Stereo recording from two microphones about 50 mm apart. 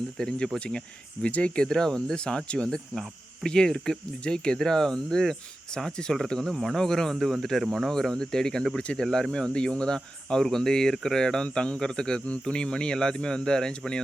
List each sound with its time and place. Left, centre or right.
0.2 s speech: centre
1.2 s speech: left
1.6 s speech: centre